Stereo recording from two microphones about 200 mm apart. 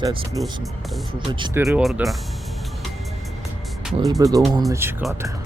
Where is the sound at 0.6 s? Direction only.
Centre (ahead or behind).